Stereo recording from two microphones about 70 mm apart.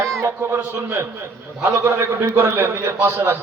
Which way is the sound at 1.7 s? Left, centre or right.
Right.